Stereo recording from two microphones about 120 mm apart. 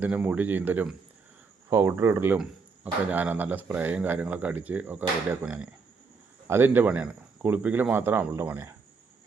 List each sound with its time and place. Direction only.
0.0 s speech: 10° right (ahead or behind)